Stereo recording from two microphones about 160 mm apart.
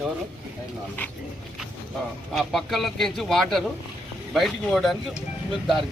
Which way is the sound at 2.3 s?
Centre (ahead or behind).